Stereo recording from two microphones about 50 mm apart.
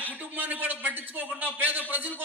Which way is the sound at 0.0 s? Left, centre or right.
Right.